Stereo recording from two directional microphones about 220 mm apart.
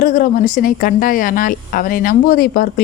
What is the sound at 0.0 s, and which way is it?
Speech, 40° left (ahead or behind).